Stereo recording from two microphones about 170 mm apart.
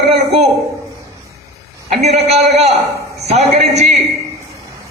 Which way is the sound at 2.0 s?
40° right (ahead or behind).